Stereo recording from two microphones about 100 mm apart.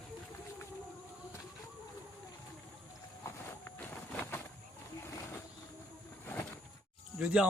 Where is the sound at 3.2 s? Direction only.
25° left (ahead or behind).